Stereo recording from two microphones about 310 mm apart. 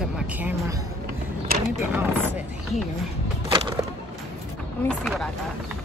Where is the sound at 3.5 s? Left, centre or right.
Centre.